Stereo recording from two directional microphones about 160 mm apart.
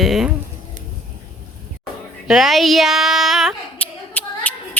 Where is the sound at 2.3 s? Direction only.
Centre (ahead or behind).